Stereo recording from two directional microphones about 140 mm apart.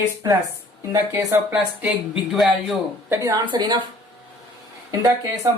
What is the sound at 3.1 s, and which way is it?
Speech, 25° right (ahead or behind).